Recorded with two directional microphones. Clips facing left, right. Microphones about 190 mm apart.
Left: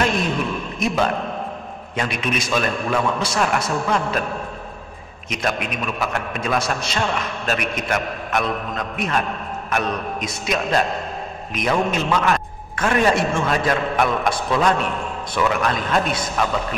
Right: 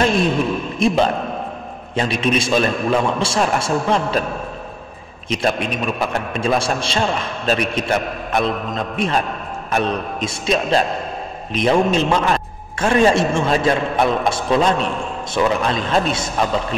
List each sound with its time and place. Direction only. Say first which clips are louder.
0.7 s a man's voice: right 4 dB; 30° right (ahead or behind)
5.3 s a man's voice: right 4 dB; 30° right (ahead or behind)